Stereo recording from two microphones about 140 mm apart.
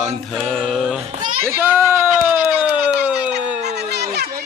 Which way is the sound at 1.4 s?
15° right (ahead or behind).